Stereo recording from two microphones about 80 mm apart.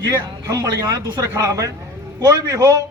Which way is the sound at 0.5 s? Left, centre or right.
Right.